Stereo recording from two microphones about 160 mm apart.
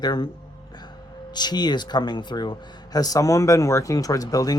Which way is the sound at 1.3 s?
25° left (ahead or behind).